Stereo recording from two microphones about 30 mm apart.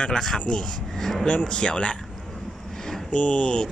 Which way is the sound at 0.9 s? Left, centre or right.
Centre.